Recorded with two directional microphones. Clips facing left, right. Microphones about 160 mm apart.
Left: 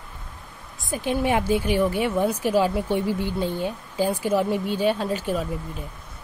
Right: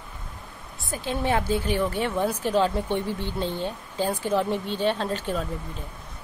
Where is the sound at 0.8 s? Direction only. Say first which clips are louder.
Left 3 dB; 15° left (ahead or behind).